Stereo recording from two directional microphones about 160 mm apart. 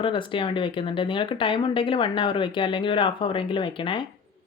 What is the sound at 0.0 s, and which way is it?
Speech, 30° left (ahead or behind).